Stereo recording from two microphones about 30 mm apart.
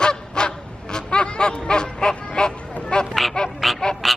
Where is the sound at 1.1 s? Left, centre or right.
Left.